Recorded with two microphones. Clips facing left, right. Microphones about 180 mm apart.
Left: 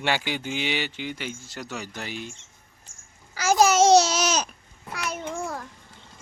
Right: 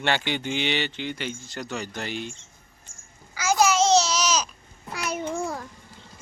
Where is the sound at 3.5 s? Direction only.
40° left (ahead or behind).